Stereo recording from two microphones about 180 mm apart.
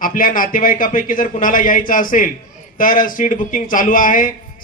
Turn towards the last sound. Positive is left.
turn(degrees=50)  # may be behind; listen again after turning